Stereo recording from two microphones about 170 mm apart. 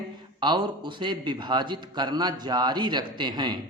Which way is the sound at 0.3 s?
25° right (ahead or behind).